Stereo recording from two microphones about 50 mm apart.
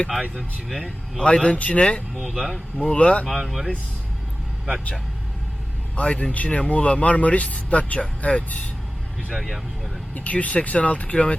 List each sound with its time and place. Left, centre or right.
1.2 s speech: left
2.1 s a man's voice: centre
2.8 s speech: left
3.2 s a man's voice: centre
6.0 s speech: left
9.3 s a man's voice: centre
10.2 s speech: left